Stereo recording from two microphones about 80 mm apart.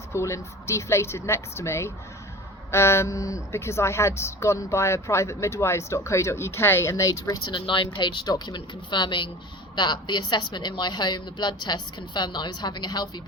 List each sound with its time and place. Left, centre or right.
0.1 s speech: left
7.5 s speech: left
7.9 s a woman's voice: left
9.7 s a woman's voice: left